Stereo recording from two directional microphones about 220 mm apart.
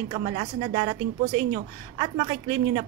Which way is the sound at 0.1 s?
25° right (ahead or behind).